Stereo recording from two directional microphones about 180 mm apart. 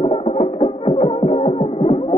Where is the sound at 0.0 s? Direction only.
35° left (ahead or behind).